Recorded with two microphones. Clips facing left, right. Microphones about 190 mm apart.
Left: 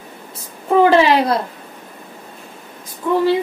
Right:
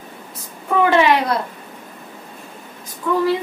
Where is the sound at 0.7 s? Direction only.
35° left (ahead or behind).